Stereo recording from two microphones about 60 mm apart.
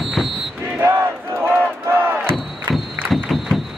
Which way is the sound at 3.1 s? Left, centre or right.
Centre.